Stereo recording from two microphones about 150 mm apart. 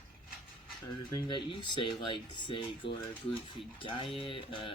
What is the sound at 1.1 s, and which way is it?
Speech, 30° left (ahead or behind).